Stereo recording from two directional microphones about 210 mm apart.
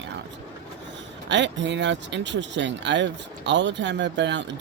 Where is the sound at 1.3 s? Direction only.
60° right (ahead or behind).